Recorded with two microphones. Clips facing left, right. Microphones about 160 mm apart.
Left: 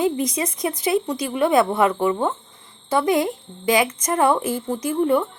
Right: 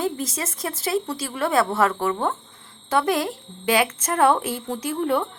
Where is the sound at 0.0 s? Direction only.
15° left (ahead or behind).